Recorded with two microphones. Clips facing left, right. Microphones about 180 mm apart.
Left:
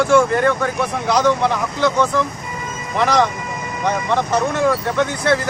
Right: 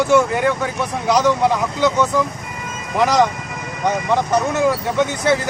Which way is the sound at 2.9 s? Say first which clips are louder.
Right 1 dB; 15° right (ahead or behind).